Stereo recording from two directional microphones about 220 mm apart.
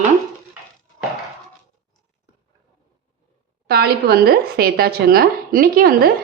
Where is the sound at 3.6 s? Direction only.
45° right (ahead or behind).